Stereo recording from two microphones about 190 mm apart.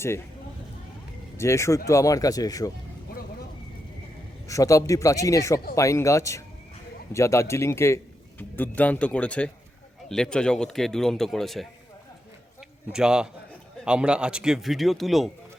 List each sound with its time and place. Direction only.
1.4 s speech: 15° left (ahead or behind)
4.4 s a man's voice: 15° left (ahead or behind); by 11.7 s centre (ahead or behind)
12.9 s a man's voice: 5° right (ahead or behind)